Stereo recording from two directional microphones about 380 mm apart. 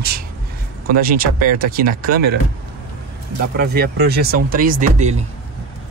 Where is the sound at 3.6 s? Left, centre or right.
Right.